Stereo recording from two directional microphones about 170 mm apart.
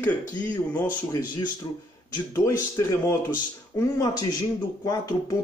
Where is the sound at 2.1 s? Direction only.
20° left (ahead or behind).